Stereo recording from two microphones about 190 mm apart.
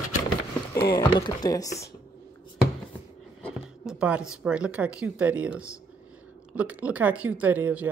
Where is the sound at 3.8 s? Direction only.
5° right (ahead or behind).